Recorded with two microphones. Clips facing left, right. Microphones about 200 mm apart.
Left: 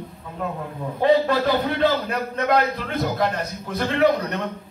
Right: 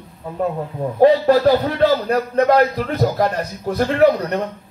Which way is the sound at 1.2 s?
35° right (ahead or behind).